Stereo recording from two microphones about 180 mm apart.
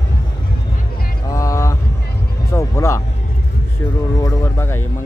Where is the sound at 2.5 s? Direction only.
15° left (ahead or behind).